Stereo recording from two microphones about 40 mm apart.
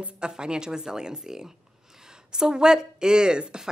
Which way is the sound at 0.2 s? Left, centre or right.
Right.